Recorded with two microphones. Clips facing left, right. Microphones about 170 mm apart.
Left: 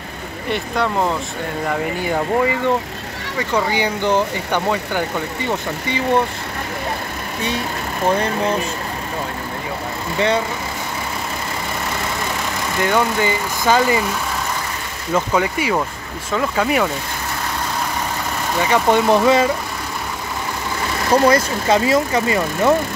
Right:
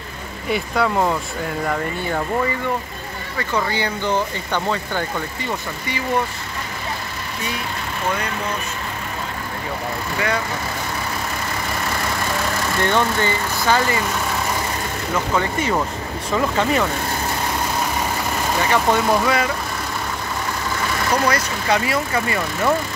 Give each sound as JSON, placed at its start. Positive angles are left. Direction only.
{"t": 0.5, "sound": "speech", "side_deg": -5}
{"t": 3.5, "sound": "speech", "side_deg": 15}
{"t": 8.1, "sound": "speech", "side_deg": 30}
{"t": 10.1, "sound": "speech", "side_deg": 25}
{"t": 12.8, "sound": "speech", "side_deg": 10}
{"t": 15.3, "sound": "speech", "side_deg": 10}
{"t": 18.7, "sound": "speech", "side_deg": 20}
{"t": 21.1, "sound": "speech", "side_deg": 25}